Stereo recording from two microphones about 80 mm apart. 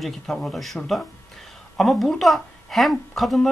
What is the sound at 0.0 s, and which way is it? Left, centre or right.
A woman's voice, centre.